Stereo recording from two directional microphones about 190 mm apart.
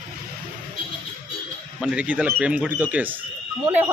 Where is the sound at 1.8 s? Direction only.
5° right (ahead or behind).